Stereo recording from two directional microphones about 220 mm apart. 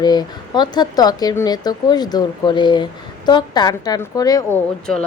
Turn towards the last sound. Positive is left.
turn(degrees=10)  # may be behind; listen again after turning